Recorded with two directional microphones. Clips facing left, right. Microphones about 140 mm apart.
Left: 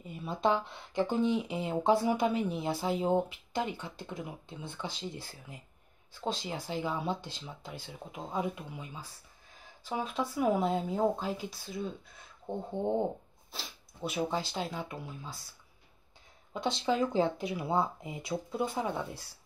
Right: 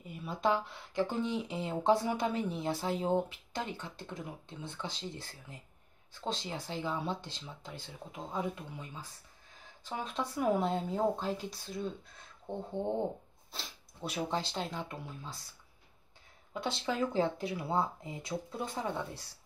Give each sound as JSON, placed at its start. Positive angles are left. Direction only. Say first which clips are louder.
{"t": 0.0, "sound": "speech", "louder": "left 2 dB", "side_deg": 25}
{"t": 16.5, "sound": "speech", "louder": "left 4 dB", "side_deg": 20}